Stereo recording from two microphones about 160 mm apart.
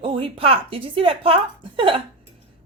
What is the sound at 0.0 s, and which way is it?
A woman's voice, 35° right (ahead or behind).